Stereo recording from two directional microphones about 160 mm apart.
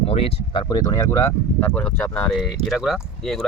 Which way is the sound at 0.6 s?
20° left (ahead or behind).